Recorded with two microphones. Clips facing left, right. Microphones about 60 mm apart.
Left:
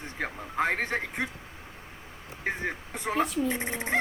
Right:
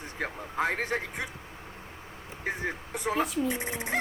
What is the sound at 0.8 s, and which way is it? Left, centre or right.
Owl, left.